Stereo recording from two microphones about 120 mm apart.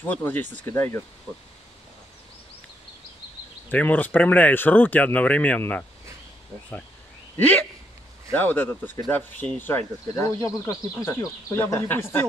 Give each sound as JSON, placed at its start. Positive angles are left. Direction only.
{"t": 0.1, "sound": "speech", "side_deg": 15}
{"t": 3.7, "sound": "speech", "side_deg": 15}
{"t": 8.3, "sound": "speech", "side_deg": 15}